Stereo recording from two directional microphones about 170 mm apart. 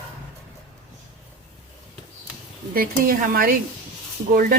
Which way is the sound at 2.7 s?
60° right (ahead or behind).